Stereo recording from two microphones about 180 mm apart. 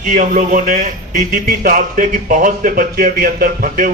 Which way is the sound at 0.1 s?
45° right (ahead or behind).